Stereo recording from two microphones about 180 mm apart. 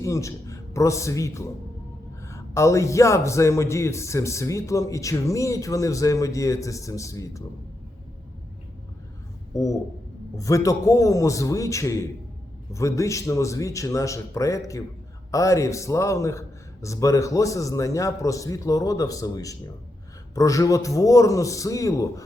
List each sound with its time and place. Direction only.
0.0 s a man's voice: 15° left (ahead or behind)
9.5 s a man's voice: 20° left (ahead or behind)